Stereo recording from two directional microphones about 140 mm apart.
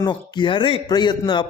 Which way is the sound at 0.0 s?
35° left (ahead or behind).